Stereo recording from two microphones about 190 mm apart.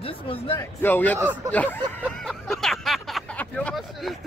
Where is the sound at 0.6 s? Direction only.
10° left (ahead or behind).